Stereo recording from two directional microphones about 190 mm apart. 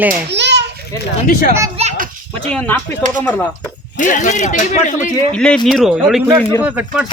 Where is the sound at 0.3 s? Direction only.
65° right (ahead or behind).